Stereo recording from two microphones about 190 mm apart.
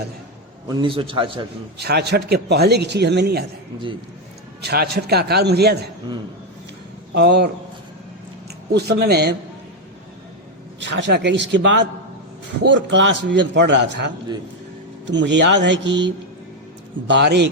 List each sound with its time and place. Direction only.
0.7 s a man's voice: 25° right (ahead or behind)
1.8 s a man's voice: 60° right (ahead or behind)
4.6 s a man's voice: 55° right (ahead or behind)
7.1 s a man's voice: 60° right (ahead or behind)
8.7 s a man's voice: 60° right (ahead or behind)
10.8 s a man's voice: 70° right (ahead or behind)